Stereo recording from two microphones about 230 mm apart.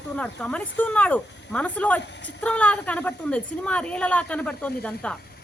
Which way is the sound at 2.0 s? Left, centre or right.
Left.